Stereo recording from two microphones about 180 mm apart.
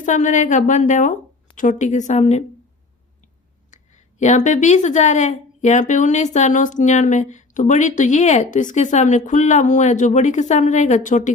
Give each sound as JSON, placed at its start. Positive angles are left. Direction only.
{"t": 0.0, "sound": "a woman's voice", "side_deg": 45}
{"t": 3.7, "sound": "speech", "side_deg": 40}